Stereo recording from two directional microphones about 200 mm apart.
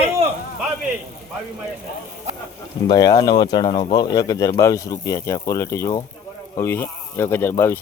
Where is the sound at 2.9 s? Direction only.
20° left (ahead or behind).